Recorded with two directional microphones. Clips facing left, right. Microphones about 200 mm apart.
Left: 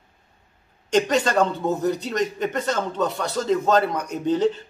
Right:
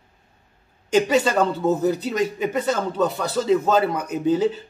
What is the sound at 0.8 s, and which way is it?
A man's voice, 5° right (ahead or behind).